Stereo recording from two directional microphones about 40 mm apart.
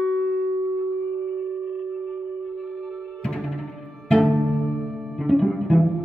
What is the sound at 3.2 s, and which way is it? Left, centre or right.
Music, centre.